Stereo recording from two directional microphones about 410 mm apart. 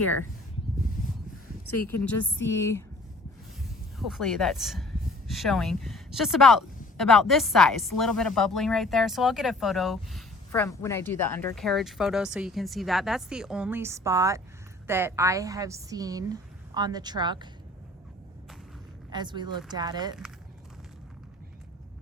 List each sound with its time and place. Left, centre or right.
0.0 s speech: left
1.9 s speech: centre
4.0 s a woman's voice: centre
19.1 s a woman's voice: centre